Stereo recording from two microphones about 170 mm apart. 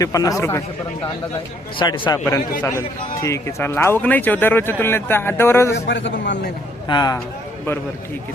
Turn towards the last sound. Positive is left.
turn(degrees=15)  # may be behind; listen again after turning